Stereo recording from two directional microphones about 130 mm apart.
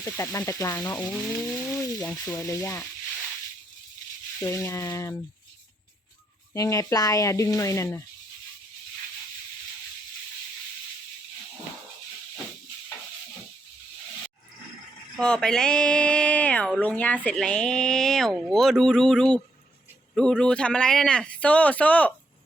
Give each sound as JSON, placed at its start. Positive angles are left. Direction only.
{"t": 0.0, "sound": "speech", "side_deg": 20}
{"t": 4.4, "sound": "speech", "side_deg": 20}
{"t": 6.5, "sound": "speech", "side_deg": 25}
{"t": 15.2, "sound": "speech", "side_deg": 5}